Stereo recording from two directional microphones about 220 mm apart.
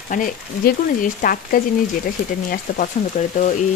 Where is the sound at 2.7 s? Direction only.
35° left (ahead or behind).